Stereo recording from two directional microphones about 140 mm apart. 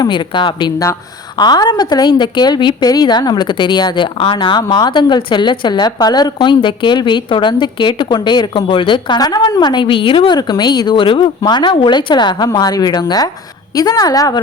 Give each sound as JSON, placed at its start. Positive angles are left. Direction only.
{"t": 0.0, "sound": "a woman's voice", "side_deg": 35}